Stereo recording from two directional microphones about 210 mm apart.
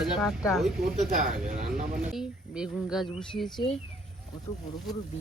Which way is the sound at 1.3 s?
40° right (ahead or behind).